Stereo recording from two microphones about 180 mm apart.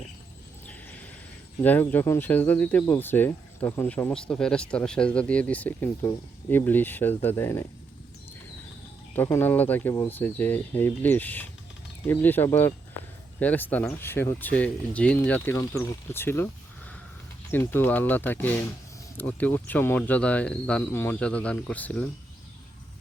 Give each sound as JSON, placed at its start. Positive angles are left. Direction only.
{"t": 1.6, "sound": "speech", "side_deg": 10}
{"t": 9.1, "sound": "speech", "side_deg": 10}